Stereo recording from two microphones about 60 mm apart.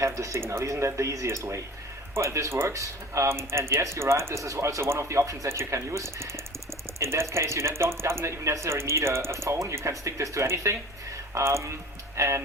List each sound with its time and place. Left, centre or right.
0.0 s speech: right
2.7 s speech: right
3.2 s speech: right